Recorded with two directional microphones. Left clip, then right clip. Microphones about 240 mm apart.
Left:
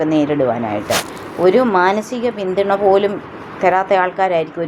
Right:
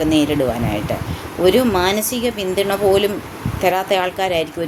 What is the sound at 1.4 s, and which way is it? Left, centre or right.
A woman's voice, centre.